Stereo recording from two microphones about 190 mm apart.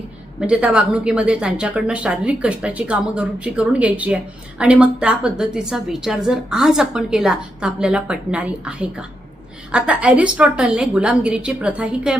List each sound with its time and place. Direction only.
0.3 s a woman's voice: 5° right (ahead or behind)